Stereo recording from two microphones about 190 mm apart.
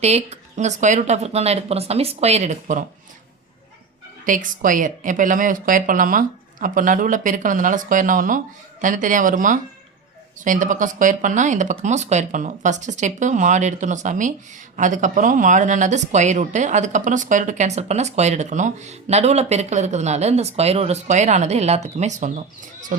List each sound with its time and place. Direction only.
0.0 s speech: 35° right (ahead or behind)
4.3 s a woman's voice: 45° right (ahead or behind)